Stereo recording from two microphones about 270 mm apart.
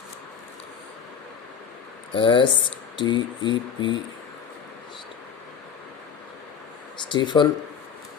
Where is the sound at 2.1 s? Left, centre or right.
Centre.